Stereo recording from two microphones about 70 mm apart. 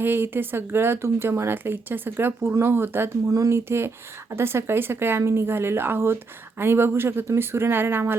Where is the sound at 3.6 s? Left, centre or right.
Right.